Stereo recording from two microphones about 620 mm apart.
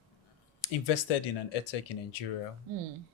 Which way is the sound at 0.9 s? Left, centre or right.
Left.